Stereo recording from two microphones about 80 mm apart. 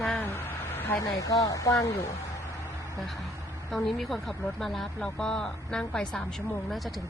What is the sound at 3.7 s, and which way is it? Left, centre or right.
Speech, centre.